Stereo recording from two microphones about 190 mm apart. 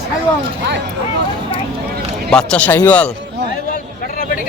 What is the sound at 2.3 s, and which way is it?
Speech, 5° left (ahead or behind).